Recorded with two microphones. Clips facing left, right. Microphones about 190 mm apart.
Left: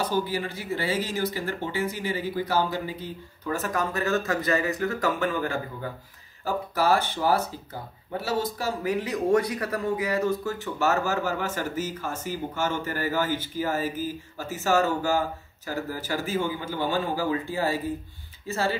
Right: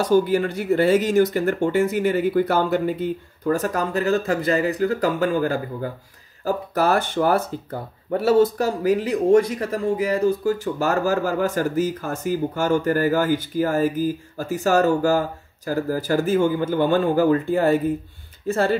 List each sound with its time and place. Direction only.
0.1 s speech: 50° right (ahead or behind)
3.4 s speech: 35° right (ahead or behind); by 8.6 s 60° right (ahead or behind)
8.8 s speech: 35° right (ahead or behind); by 18.8 s 55° right (ahead or behind)